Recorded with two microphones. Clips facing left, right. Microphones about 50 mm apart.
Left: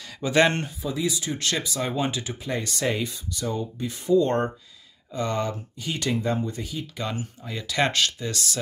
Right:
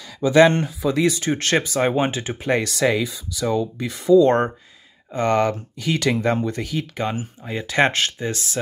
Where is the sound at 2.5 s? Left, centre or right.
Right.